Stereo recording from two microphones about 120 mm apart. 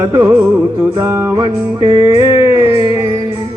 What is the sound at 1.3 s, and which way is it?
Music, 35° right (ahead or behind).